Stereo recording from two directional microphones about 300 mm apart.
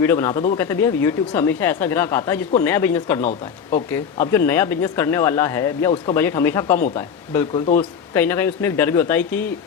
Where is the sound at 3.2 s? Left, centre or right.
Left.